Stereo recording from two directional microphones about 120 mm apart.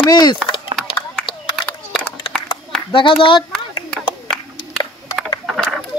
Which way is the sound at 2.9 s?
45° left (ahead or behind).